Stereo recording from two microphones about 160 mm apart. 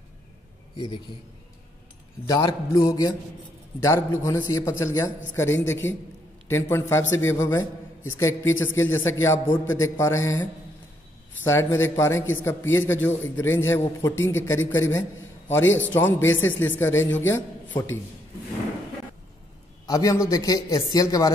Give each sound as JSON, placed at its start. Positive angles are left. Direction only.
{"t": 2.2, "sound": "a man's voice", "side_deg": 20}
{"t": 19.9, "sound": "a man's voice", "side_deg": 20}